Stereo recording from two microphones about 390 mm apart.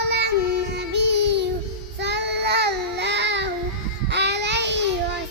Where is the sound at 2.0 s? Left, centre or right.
Right.